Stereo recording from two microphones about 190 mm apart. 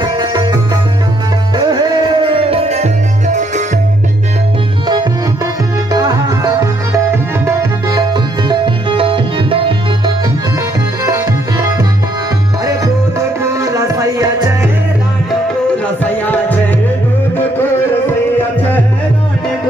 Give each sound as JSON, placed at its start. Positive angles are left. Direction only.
{"t": 0.0, "sound": "music", "side_deg": -20}
{"t": 1.6, "sound": "music", "side_deg": -20}
{"t": 5.9, "sound": "music", "side_deg": -20}
{"t": 13.4, "sound": "music", "side_deg": -15}
{"t": 15.8, "sound": "a sound", "side_deg": 10}